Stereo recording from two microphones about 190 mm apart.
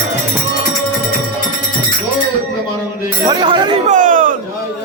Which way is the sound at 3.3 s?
25° right (ahead or behind).